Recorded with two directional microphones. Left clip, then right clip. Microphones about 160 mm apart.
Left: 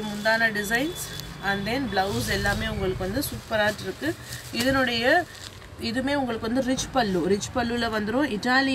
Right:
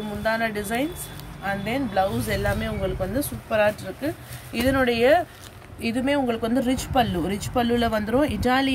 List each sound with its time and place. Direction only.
0.2 s speech: 50° right (ahead or behind)